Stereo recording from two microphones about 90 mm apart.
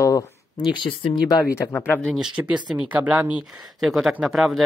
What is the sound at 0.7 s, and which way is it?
Speech, 65° left (ahead or behind).